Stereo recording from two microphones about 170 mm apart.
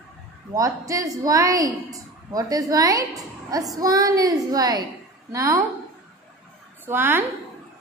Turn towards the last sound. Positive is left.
turn(degrees=-15)  # may be behind; listen again after turning